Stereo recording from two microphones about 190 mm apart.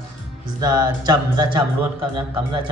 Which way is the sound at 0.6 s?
20° right (ahead or behind).